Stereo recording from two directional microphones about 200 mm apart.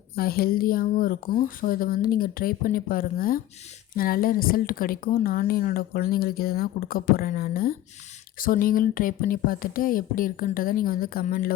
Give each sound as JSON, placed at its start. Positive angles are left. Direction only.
{"t": 0.2, "sound": "a woman's voice", "side_deg": 50}